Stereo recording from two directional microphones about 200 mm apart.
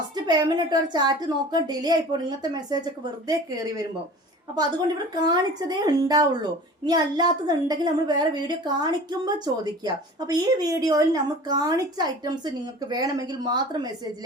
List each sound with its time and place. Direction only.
0.3 s a woman's voice: 20° right (ahead or behind)
5.2 s a woman's voice: 20° right (ahead or behind)